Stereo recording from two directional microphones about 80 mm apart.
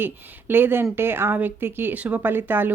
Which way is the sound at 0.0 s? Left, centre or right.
Right.